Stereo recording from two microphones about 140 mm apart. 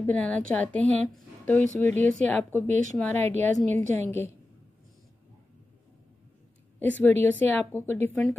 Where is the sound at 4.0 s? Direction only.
15° left (ahead or behind).